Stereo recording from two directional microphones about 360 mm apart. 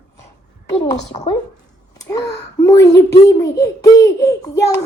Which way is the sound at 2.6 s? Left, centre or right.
Centre.